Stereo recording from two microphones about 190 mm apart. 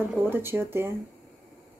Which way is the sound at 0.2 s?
10° right (ahead or behind).